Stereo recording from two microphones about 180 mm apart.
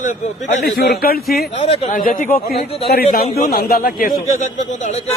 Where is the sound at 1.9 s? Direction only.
50° left (ahead or behind).